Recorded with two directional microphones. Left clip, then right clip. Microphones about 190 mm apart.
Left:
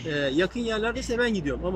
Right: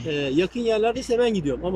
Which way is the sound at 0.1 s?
15° right (ahead or behind).